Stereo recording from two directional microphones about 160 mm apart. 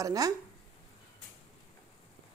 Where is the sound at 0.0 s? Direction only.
20° right (ahead or behind).